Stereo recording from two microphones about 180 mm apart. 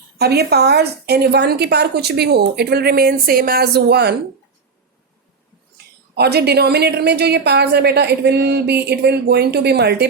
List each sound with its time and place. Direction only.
0.2 s a woman's voice: 65° right (ahead or behind)
5.7 s a woman's voice: 65° right (ahead or behind)